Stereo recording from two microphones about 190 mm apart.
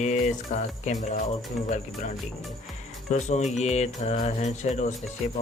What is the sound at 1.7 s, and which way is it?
Speech, 40° left (ahead or behind).